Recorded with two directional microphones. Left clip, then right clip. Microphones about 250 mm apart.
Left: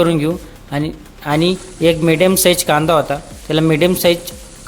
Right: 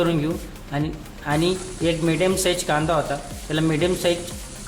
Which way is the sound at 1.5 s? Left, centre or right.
Centre.